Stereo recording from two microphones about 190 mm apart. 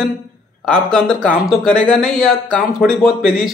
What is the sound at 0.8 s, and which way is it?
A man's voice, centre (ahead or behind).